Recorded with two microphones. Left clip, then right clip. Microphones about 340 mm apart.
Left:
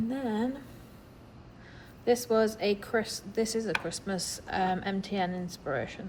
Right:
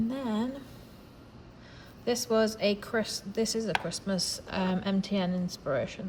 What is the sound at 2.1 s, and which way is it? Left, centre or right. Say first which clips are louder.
Speech: left 1 dB; centre.